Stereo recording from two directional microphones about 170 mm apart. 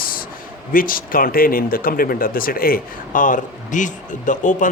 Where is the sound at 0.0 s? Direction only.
55° left (ahead or behind).